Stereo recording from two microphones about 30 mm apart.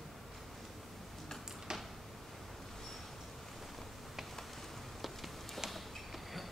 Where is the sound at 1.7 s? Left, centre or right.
Right.